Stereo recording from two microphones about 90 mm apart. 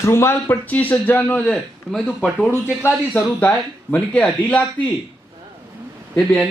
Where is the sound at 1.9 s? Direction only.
5° left (ahead or behind).